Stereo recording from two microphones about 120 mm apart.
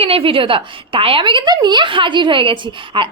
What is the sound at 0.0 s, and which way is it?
A woman's voice, 50° right (ahead or behind).